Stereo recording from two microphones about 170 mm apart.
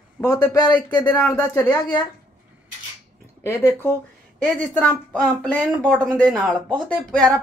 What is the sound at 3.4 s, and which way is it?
Speech, 10° left (ahead or behind).